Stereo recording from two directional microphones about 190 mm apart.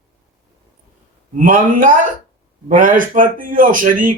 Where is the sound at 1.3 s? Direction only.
45° right (ahead or behind).